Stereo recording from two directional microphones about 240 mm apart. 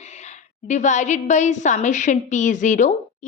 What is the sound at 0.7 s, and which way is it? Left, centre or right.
A woman's voice, left.